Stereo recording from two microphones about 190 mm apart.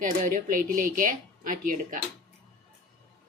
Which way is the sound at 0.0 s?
45° right (ahead or behind).